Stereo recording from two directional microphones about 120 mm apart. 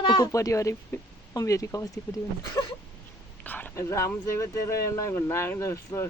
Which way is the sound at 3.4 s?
15° left (ahead or behind).